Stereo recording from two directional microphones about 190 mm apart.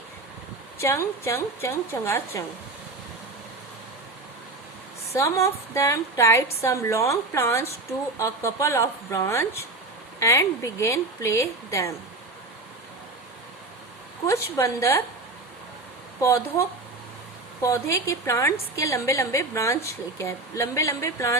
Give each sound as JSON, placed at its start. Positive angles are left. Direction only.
{"t": 0.8, "sound": "a woman's voice", "side_deg": 15}
{"t": 5.0, "sound": "a woman's voice", "side_deg": 15}
{"t": 14.3, "sound": "a woman's voice", "side_deg": 15}
{"t": 16.2, "sound": "a woman's voice", "side_deg": 15}